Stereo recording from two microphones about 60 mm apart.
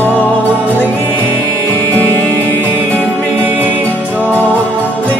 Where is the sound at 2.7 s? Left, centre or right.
Right.